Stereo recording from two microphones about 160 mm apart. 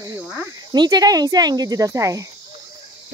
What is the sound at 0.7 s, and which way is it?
Speech, 25° right (ahead or behind).